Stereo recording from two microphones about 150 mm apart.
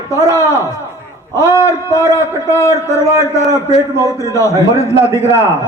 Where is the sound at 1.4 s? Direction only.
20° left (ahead or behind).